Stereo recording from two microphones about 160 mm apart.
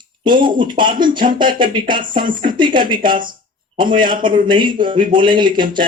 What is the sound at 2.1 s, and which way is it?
Speech, 30° right (ahead or behind).